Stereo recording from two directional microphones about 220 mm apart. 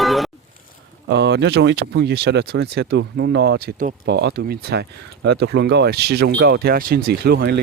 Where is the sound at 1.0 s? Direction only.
50° right (ahead or behind).